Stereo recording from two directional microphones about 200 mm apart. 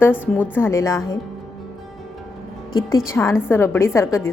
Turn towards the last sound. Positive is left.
turn(degrees=15)  # may be behind; listen again after turning